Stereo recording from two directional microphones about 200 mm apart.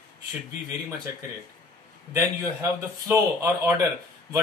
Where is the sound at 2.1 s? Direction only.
15° right (ahead or behind).